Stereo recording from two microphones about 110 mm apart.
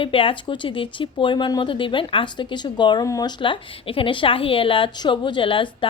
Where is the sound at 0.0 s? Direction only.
55° left (ahead or behind); by 3.3 s 35° left (ahead or behind).